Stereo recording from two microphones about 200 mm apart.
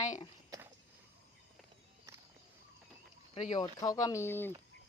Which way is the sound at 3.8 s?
20° left (ahead or behind).